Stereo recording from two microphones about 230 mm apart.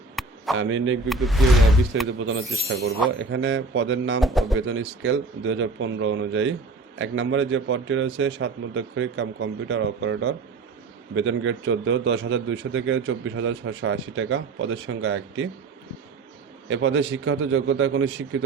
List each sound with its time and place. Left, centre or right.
0.2 s chop: centre
0.5 s a man's voice: right
1.0 s speech: centre
2.1 s a man's voice: right
4.2 s speech: centre
4.5 s a man's voice: right
16.6 s a man's voice: right